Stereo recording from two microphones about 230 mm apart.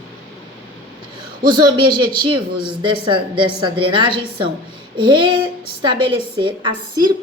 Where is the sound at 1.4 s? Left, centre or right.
Centre.